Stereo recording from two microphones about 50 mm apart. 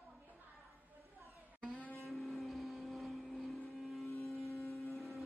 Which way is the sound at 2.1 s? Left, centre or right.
Centre.